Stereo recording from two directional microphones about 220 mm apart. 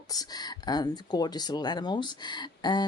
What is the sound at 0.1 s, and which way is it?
Speech, 15° left (ahead or behind).